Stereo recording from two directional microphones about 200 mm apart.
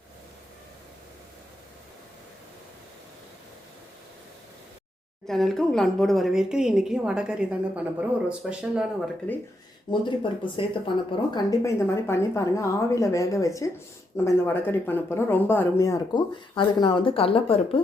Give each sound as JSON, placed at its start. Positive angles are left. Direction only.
{"t": 5.2, "sound": "a woman's voice", "side_deg": 0}
{"t": 9.9, "sound": "speech", "side_deg": 25}